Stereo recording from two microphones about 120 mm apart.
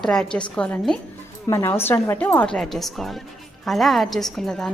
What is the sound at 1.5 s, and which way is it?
A woman's voice, 25° left (ahead or behind).